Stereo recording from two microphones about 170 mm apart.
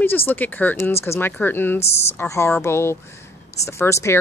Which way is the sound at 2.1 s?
15° left (ahead or behind).